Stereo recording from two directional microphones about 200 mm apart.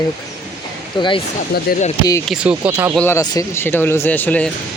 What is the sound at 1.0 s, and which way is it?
Speech, 20° left (ahead or behind).